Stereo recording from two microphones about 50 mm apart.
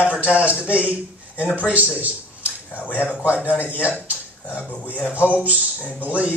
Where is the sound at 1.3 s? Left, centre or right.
Left.